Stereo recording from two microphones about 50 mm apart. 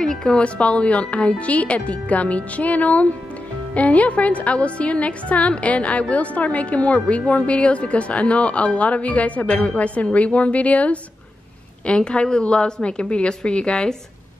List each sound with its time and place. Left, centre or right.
0.0 s a woman's voice: centre
0.6 s a woman's voice: left